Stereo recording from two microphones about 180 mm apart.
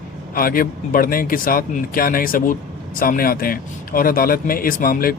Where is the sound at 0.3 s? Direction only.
55° left (ahead or behind).